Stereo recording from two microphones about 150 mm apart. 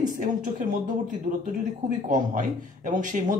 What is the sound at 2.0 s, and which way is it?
Speech, 60° right (ahead or behind).